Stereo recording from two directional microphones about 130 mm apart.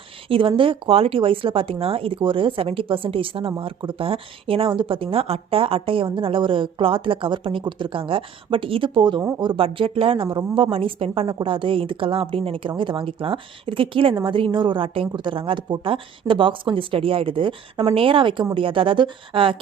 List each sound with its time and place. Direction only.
0.3 s a woman's voice: 45° right (ahead or behind)